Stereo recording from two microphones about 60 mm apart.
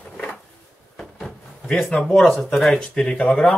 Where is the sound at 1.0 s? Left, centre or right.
Centre.